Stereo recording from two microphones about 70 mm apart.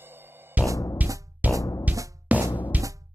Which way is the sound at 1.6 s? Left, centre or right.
Left.